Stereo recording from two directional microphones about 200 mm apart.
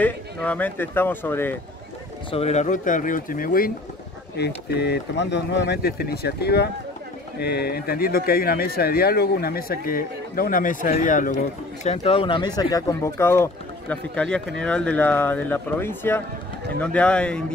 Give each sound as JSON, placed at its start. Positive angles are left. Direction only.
{"t": 0.0, "sound": "speech", "side_deg": 10}
{"t": 2.3, "sound": "speech", "side_deg": 35}
{"t": 4.4, "sound": "speech", "side_deg": 55}